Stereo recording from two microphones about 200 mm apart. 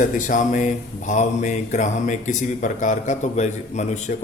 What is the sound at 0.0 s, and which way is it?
Speech, 40° left (ahead or behind).